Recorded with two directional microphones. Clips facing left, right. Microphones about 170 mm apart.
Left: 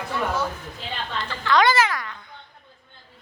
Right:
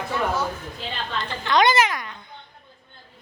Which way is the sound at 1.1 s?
20° right (ahead or behind).